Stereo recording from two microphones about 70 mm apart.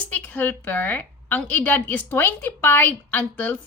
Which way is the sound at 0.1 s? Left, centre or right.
Left.